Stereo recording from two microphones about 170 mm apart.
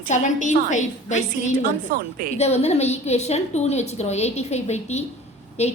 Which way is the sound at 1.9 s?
55° right (ahead or behind).